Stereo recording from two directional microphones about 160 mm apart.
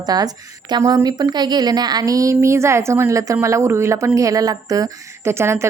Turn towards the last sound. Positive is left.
turn(degrees=-15)  # may be behind; listen again after turning